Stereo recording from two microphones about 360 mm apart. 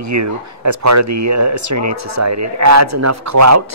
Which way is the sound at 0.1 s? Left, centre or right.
Right.